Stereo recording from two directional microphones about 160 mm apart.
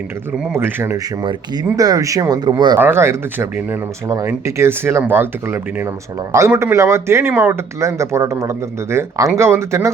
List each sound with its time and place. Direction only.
0.5 s speech: 15° right (ahead or behind)
2.7 s speech: 15° right (ahead or behind)